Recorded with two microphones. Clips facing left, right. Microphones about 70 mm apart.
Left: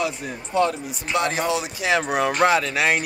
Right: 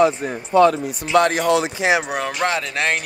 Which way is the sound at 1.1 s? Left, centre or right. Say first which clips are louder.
Right 7 dB; right.